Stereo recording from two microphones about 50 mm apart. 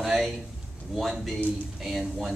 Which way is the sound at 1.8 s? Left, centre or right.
Centre.